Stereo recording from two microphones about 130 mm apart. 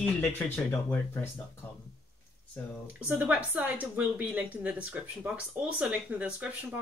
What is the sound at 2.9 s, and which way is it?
Speech, 10° right (ahead or behind).